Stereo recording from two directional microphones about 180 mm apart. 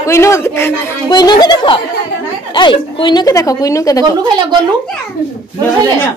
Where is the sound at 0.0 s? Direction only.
15° left (ahead or behind).